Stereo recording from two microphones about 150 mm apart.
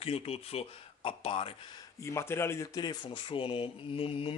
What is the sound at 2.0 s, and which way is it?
Speech, 20° left (ahead or behind).